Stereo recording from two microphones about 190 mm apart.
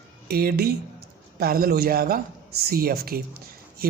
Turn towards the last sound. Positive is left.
turn(degrees=-50)  # may be behind; listen again after turning